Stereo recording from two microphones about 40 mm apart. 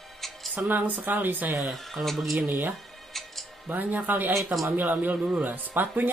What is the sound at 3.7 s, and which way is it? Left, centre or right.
Speech, right.